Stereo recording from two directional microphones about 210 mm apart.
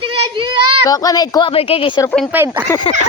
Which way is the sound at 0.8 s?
15° left (ahead or behind).